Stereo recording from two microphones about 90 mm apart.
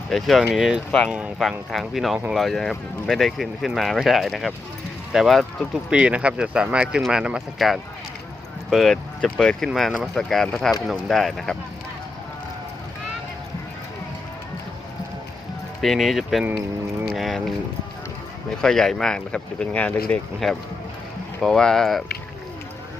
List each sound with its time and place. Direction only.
0.1 s speech: centre (ahead or behind)
0.9 s speech: 5° left (ahead or behind)
5.9 s speech: 15° right (ahead or behind); by 11.5 s 5° left (ahead or behind)
15.8 s speech: centre (ahead or behind)
18.6 s speech: 5° left (ahead or behind)
21.4 s speech: 5° left (ahead or behind)